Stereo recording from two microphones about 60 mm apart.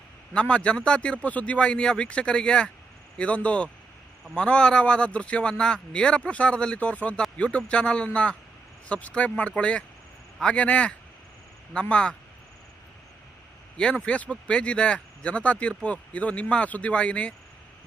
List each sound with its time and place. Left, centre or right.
0.3 s speech: centre
13.7 s speech: centre